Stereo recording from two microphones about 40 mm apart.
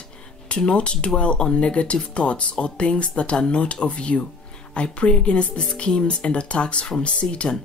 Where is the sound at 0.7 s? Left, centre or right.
Left.